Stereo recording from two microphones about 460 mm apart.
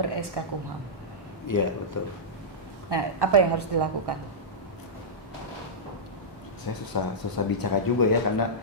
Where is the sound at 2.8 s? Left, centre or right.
Right.